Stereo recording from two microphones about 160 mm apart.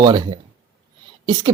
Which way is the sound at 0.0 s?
30° right (ahead or behind).